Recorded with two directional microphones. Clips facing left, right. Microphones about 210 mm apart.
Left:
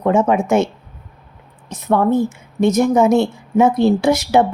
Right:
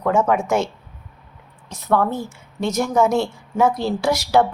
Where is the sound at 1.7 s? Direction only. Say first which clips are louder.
Left 5 dB; 20° left (ahead or behind).